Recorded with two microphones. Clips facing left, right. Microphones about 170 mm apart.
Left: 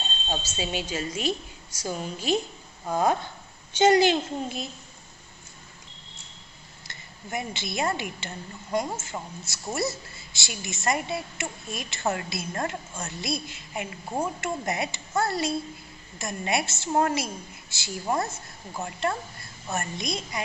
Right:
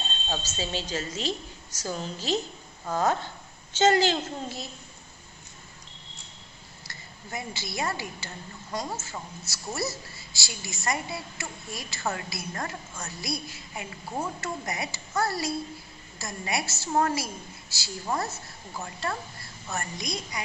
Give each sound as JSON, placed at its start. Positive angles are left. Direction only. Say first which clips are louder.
{"t": 0.3, "sound": "a woman's voice", "louder": "left 2 dB", "side_deg": 10}
{"t": 6.9, "sound": "a woman's voice", "louder": "left 4 dB", "side_deg": 20}
{"t": 19.7, "sound": "a woman's voice", "louder": "left 3 dB", "side_deg": 25}